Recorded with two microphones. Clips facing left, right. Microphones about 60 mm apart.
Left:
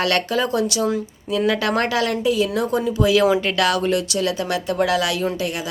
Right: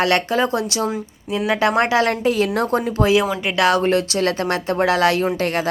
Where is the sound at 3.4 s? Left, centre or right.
Right.